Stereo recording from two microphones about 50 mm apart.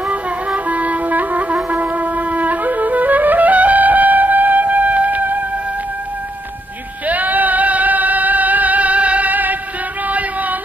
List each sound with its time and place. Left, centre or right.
0.1 s wind instrument: right
7.1 s music: right
10.0 s a sound: right